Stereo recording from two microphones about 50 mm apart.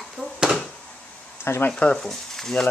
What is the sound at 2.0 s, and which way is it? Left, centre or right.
Speech, centre.